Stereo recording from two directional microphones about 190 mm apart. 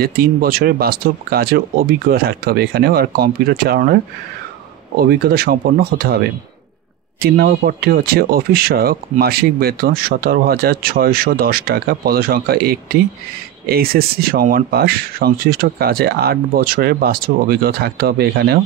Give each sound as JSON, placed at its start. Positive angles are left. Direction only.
{"t": 0.0, "sound": "speech", "side_deg": -50}
{"t": 5.0, "sound": "speech", "side_deg": -55}
{"t": 7.2, "sound": "speech", "side_deg": -55}